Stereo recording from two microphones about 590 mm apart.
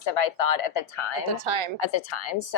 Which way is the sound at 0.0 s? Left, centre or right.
Left.